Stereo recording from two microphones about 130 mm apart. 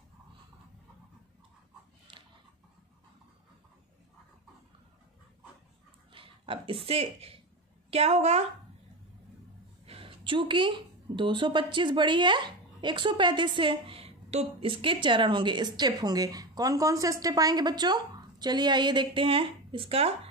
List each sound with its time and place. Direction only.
6.1 s a sound: 40° right (ahead or behind)
6.9 s a woman's voice: 50° right (ahead or behind)
9.8 s speech: 45° right (ahead or behind)